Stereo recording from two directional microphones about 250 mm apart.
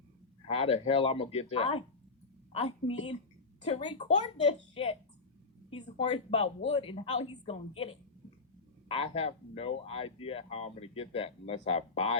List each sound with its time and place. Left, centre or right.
0.4 s speech: left